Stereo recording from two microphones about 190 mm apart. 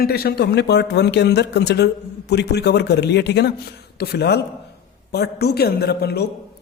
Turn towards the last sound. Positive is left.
turn(degrees=60)  # may be behind; listen again after turning